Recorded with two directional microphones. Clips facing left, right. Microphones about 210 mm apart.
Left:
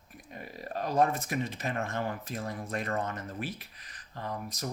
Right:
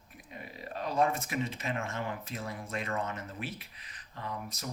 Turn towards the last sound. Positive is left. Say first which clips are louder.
# left 3 dB
turn(degrees=40)  # may be behind; listen again after turning